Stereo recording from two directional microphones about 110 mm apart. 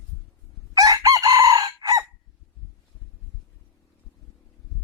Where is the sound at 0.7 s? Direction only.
35° right (ahead or behind).